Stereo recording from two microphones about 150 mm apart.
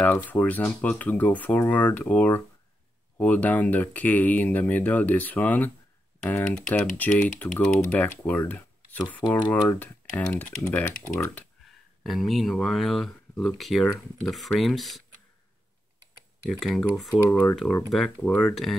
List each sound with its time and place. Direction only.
0.0 s speech: 10° left (ahead or behind)
12.0 s speech: centre (ahead or behind)
16.4 s speech: centre (ahead or behind)
18.2 s speech: 10° left (ahead or behind)
18.5 s speech: centre (ahead or behind)